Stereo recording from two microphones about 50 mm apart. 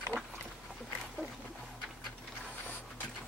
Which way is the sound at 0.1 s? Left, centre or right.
Right.